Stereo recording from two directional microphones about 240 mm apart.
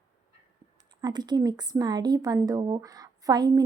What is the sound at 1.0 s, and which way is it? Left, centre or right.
Speech, centre.